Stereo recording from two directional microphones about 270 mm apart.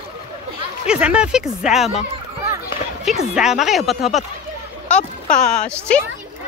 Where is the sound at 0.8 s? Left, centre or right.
Centre.